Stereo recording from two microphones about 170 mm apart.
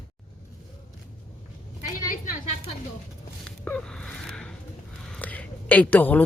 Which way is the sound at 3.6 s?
5° left (ahead or behind).